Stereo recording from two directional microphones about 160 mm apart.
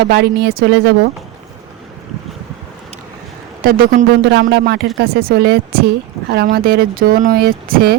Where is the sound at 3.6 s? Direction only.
65° right (ahead or behind); by 4.9 s 90° right.